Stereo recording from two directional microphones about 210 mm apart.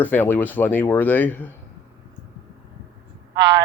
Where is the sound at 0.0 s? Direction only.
10° left (ahead or behind).